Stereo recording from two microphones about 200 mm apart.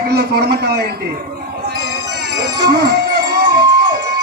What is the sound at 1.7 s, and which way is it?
Music, 55° right (ahead or behind).